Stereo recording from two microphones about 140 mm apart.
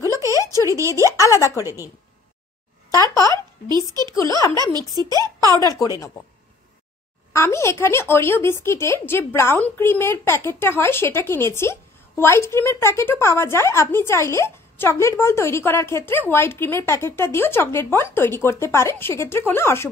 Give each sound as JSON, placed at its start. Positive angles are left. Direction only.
{"t": 0.2, "sound": "a sound", "side_deg": -25}
{"t": 0.6, "sound": "speech", "side_deg": -20}
{"t": 1.1, "sound": "speech", "side_deg": 20}
{"t": 3.6, "sound": "a woman's voice", "side_deg": -30}
{"t": 4.1, "sound": "speech", "side_deg": 25}
{"t": 4.9, "sound": "a woman's voice", "side_deg": -25}
{"t": 7.3, "sound": "a woman's voice", "side_deg": 20}